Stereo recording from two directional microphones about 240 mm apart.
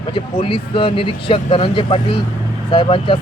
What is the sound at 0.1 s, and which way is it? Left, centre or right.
Speech, left.